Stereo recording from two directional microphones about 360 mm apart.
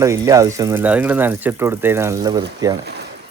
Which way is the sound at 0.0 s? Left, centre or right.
Centre.